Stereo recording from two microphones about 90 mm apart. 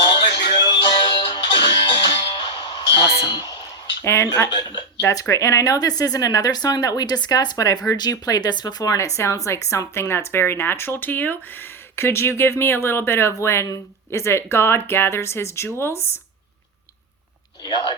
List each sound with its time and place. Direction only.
0.1 s music: 60° left (ahead or behind)
4.0 s speech: 30° left (ahead or behind)
4.4 s speech: 55° left (ahead or behind)
4.9 s speech: 30° left (ahead or behind)
17.6 s speech: 60° left (ahead or behind)